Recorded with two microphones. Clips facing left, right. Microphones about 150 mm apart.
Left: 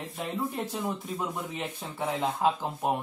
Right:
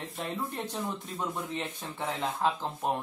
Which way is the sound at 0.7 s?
5° left (ahead or behind).